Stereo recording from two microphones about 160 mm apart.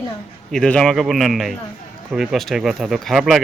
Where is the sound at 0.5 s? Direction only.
5° left (ahead or behind).